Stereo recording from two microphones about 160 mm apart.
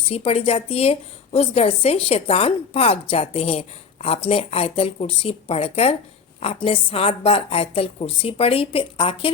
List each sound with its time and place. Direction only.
0.1 s a woman's voice: 40° left (ahead or behind)